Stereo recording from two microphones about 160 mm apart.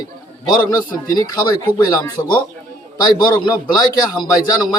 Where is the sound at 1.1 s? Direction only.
25° left (ahead or behind).